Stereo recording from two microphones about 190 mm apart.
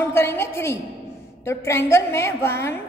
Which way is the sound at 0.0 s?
10° left (ahead or behind).